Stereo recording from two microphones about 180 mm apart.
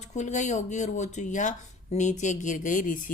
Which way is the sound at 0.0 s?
40° left (ahead or behind).